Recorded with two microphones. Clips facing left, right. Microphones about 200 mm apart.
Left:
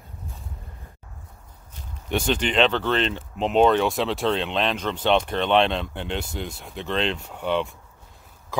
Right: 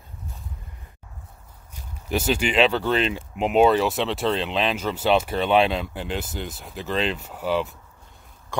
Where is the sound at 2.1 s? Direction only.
5° right (ahead or behind).